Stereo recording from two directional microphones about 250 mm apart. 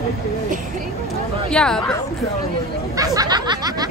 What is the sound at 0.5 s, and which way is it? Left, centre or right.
Speech, right.